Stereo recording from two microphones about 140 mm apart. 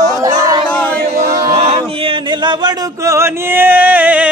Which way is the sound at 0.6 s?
10° left (ahead or behind).